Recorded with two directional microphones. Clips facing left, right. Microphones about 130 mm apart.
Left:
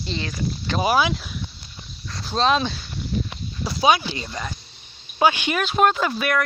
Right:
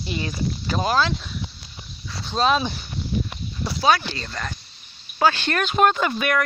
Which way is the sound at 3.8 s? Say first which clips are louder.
Left 1 dB; 15° left (ahead or behind).